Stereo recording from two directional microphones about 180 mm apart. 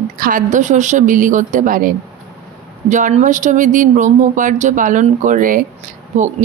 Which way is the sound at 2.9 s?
40° right (ahead or behind).